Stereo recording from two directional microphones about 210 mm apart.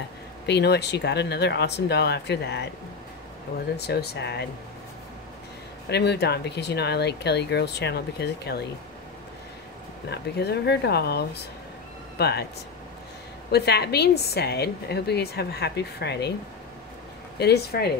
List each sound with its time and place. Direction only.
0.5 s speech: 55° left (ahead or behind)
3.7 s speech: 50° left (ahead or behind)
5.9 s speech: 50° left (ahead or behind)
10.0 s speech: 50° left (ahead or behind)
13.5 s speech: 50° left (ahead or behind)
17.4 s speech: 50° left (ahead or behind)